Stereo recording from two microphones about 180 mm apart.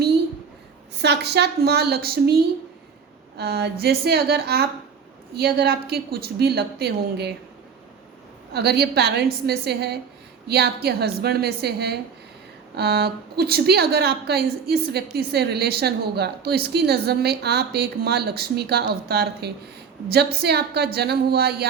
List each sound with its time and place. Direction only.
0.9 s a woman's voice: 70° right (ahead or behind)
8.5 s a woman's voice: 60° right (ahead or behind)